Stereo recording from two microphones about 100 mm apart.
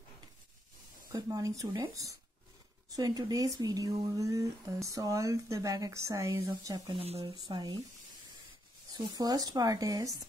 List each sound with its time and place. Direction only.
1.1 s speech: 35° right (ahead or behind)
6.9 s speech: 85° right
7.4 s speech: 50° right (ahead or behind)
8.9 s speech: 45° right (ahead or behind)